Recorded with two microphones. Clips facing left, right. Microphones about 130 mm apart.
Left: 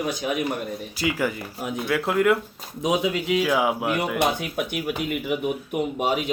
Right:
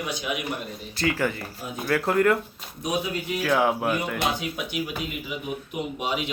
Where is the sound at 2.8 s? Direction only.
90° left.